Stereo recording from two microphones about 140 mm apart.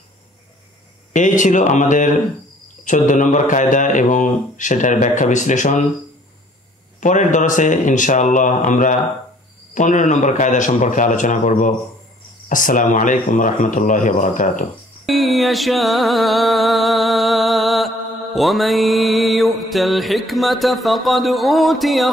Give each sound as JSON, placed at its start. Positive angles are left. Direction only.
{"t": 1.1, "sound": "speech", "side_deg": 65}
{"t": 7.0, "sound": "speech", "side_deg": 65}
{"t": 15.0, "sound": "music", "side_deg": 0}